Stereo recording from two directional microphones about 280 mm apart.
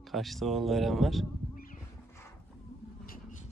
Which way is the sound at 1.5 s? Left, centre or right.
Left.